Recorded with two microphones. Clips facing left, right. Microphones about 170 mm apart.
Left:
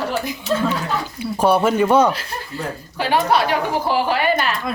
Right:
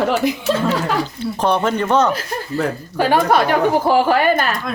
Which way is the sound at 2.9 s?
45° right (ahead or behind).